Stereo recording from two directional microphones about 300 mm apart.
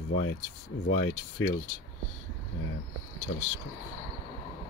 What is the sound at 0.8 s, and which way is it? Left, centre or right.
Speech, left.